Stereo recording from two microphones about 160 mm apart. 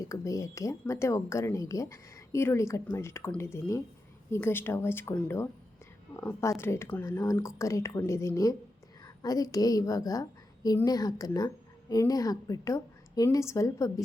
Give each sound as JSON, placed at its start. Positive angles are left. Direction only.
{"t": 0.0, "sound": "a woman's voice", "side_deg": 20}